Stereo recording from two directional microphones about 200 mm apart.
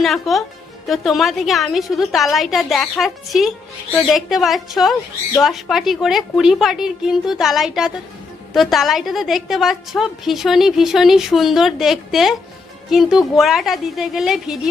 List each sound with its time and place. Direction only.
0.0 s a woman's voice: centre (ahead or behind)